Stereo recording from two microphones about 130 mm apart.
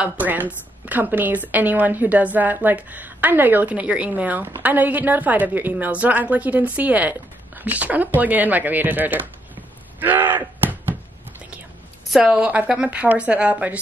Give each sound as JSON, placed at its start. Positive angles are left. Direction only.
{"t": 0.0, "sound": "a woman's voice", "side_deg": -15}
{"t": 9.9, "sound": "a sound", "side_deg": -15}
{"t": 12.1, "sound": "a woman's voice", "side_deg": -10}